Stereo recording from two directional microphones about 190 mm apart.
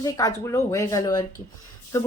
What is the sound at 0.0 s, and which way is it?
Speech, 15° left (ahead or behind).